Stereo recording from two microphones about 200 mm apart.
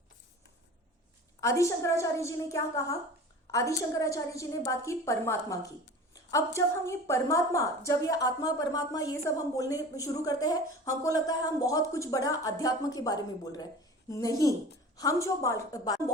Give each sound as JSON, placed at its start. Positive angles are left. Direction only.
{"t": 1.4, "sound": "a woman's voice", "side_deg": 15}